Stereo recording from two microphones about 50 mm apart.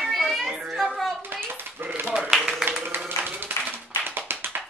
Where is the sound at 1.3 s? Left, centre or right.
Right.